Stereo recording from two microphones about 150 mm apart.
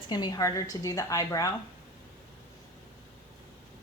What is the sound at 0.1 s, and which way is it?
A woman's voice, 25° left (ahead or behind).